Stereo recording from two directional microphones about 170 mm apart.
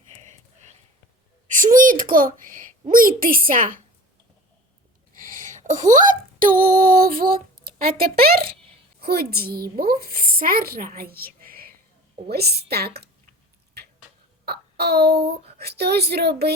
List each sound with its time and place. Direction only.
1.5 s speech: 50° right (ahead or behind)
5.5 s a sound: 50° right (ahead or behind)
9.0 s a woman's voice: 65° right (ahead or behind)
14.4 s child singing: 70° right (ahead or behind)
15.5 s a woman's voice: 70° right (ahead or behind)